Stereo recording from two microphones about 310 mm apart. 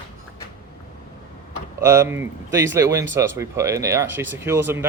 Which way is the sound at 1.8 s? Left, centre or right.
Centre.